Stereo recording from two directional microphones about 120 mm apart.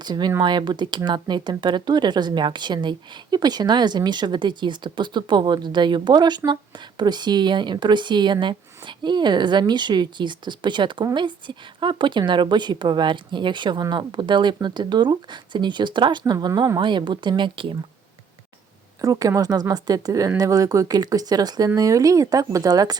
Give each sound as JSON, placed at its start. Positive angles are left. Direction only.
{"t": 0.0, "sound": "speech", "side_deg": -35}
{"t": 19.0, "sound": "speech", "side_deg": -30}